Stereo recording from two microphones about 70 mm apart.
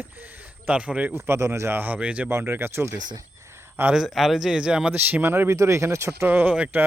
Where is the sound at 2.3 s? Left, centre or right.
Right.